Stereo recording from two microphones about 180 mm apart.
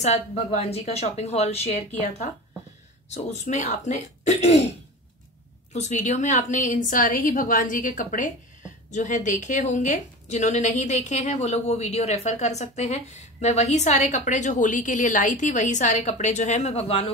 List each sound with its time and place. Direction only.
0.0 s a woman's voice: 40° left (ahead or behind)